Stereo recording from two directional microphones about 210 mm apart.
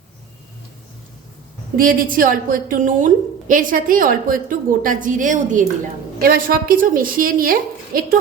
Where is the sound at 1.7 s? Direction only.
40° right (ahead or behind).